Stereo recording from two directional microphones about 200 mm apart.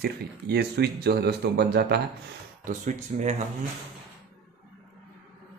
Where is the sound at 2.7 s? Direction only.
40° right (ahead or behind).